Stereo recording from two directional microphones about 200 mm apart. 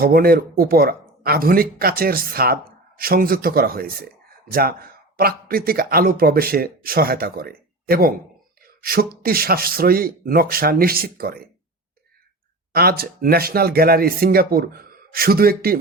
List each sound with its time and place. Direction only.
0.0 s speech: 50° right (ahead or behind)
8.6 s a sound: 50° right (ahead or behind)
9.2 s speech: 50° right (ahead or behind)
12.7 s speech: 50° right (ahead or behind)